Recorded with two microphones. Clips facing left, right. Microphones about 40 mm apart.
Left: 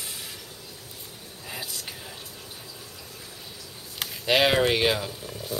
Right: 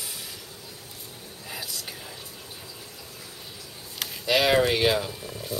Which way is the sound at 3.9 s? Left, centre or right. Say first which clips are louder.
Even; centre.